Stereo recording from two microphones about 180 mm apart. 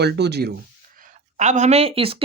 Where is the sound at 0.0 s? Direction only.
65° right (ahead or behind).